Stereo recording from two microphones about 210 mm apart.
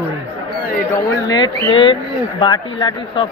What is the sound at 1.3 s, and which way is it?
Speech, 25° left (ahead or behind).